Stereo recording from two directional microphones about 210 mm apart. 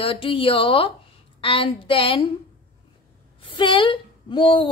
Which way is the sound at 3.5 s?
25° left (ahead or behind).